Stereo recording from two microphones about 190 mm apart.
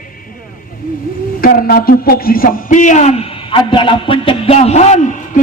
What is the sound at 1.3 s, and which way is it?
A man's voice, 50° left (ahead or behind).